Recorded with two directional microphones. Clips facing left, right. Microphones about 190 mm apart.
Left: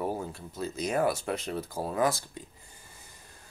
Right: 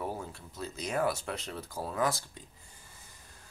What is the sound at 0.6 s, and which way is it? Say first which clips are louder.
Speech: left 4 dB; 5° left (ahead or behind).